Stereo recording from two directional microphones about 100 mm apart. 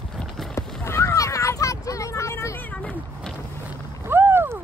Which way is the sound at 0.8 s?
25° left (ahead or behind).